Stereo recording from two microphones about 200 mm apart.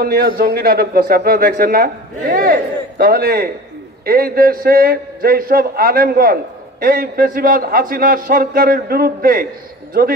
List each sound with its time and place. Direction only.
0.0 s a man's voice: 50° right (ahead or behind)